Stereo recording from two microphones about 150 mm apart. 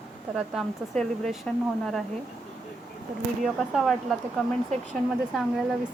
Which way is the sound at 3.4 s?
Centre (ahead or behind).